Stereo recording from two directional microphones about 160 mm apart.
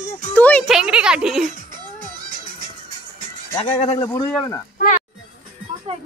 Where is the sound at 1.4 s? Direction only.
60° right (ahead or behind).